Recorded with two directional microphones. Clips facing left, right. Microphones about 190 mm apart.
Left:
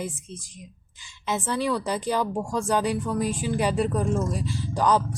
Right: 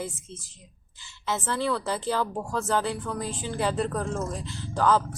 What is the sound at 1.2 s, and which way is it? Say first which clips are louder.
Speech: left 2 dB; 15° left (ahead or behind).